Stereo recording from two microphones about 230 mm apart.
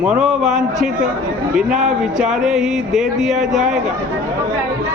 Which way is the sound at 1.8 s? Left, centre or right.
Centre.